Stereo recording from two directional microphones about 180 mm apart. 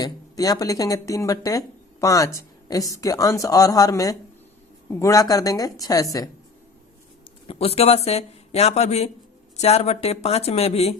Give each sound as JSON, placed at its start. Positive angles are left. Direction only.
{"t": 0.0, "sound": "speech", "side_deg": 20}
{"t": 7.4, "sound": "speech", "side_deg": 35}